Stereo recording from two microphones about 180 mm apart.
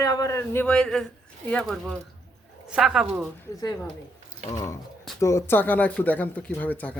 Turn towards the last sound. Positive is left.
turn(degrees=10)  # may be behind; listen again after turning